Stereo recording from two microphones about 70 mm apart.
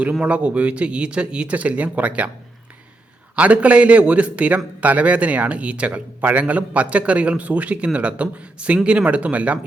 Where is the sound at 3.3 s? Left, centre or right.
Centre.